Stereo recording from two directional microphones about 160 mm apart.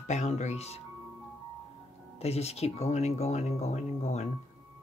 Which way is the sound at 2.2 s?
40° left (ahead or behind).